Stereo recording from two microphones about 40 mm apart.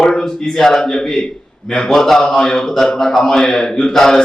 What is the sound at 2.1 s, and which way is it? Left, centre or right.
Speech, centre.